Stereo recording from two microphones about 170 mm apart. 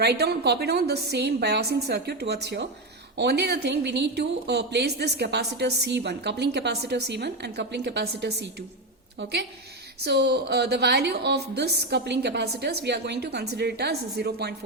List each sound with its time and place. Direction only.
0.0 s a woman's voice: 70° right (ahead or behind)
10.0 s a woman's voice: 75° right (ahead or behind)